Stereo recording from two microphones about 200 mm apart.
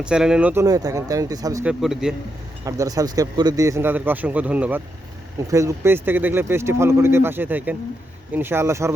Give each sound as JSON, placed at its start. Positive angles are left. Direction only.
{"t": 0.0, "sound": "speech", "side_deg": -5}
{"t": 1.6, "sound": "a man's voice", "side_deg": -5}
{"t": 2.6, "sound": "speech", "side_deg": -15}